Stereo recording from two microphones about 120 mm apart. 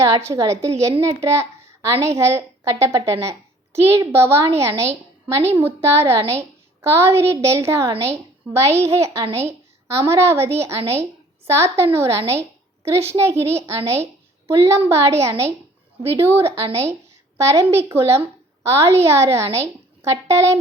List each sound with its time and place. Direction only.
0.0 s a child's voice: 25° right (ahead or behind)
9.0 s speech: 60° right (ahead or behind)
9.5 s a woman's voice: 25° right (ahead or behind)